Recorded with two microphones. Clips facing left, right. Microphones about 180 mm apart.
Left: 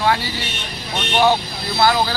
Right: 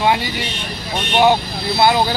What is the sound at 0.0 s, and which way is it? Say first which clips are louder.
Speech: right 2 dB; 20° right (ahead or behind).